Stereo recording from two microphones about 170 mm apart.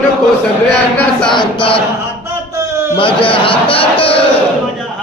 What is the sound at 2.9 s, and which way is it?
A man's voice, 30° left (ahead or behind).